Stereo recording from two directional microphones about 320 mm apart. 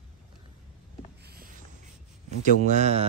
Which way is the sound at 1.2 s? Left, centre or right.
Right.